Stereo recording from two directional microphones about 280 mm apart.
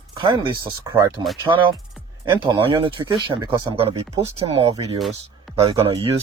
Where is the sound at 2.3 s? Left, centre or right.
Centre.